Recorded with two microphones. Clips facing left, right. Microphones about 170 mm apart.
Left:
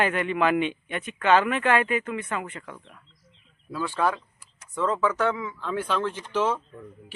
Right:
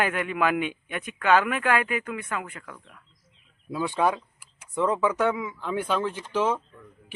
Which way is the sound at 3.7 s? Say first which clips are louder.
Right 1 dB; 20° right (ahead or behind).